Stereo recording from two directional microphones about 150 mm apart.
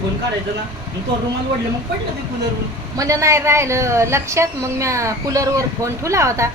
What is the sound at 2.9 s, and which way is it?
A woman's voice, 20° right (ahead or behind).